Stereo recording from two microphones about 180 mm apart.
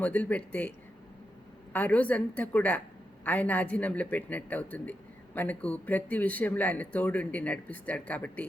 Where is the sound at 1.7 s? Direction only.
5° left (ahead or behind).